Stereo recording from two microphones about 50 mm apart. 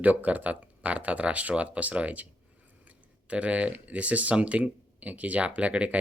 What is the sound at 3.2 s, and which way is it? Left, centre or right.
Speech, right.